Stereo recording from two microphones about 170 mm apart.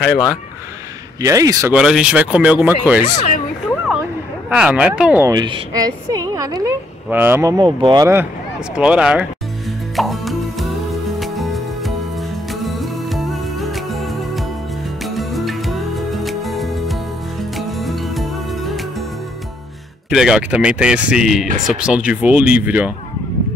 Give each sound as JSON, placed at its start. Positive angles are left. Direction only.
{"t": 0.0, "sound": "speech", "side_deg": -5}
{"t": 1.2, "sound": "a woman's voice", "side_deg": -20}
{"t": 1.7, "sound": "speech", "side_deg": -5}
{"t": 4.5, "sound": "speech", "side_deg": -5}
{"t": 5.2, "sound": "a woman's voice", "side_deg": -25}
{"t": 8.7, "sound": "speech", "side_deg": -5}
{"t": 9.9, "sound": "music", "side_deg": 0}
{"t": 20.1, "sound": "speech", "side_deg": -5}